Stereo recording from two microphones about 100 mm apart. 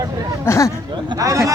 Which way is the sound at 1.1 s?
35° right (ahead or behind).